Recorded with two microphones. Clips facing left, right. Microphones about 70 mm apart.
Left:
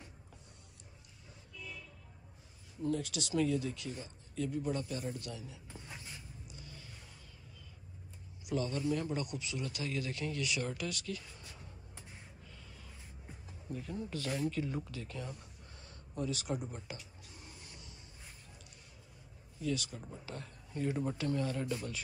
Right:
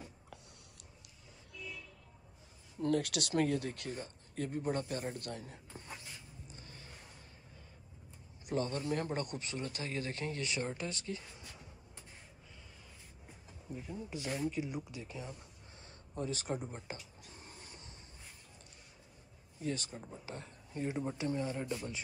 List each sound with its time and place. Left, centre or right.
2.8 s speech: right
6.4 s a sound: right
8.5 s a man's voice: right
13.7 s speech: centre
15.8 s a sound: right
16.7 s writing: right
19.6 s a man's voice: right